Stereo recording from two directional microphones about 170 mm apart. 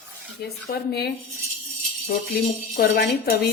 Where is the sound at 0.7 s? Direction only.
70° left (ahead or behind).